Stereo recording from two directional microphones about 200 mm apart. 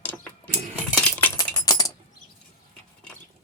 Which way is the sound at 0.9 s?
10° left (ahead or behind).